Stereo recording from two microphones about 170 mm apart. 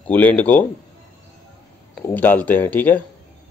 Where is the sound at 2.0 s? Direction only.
10° left (ahead or behind).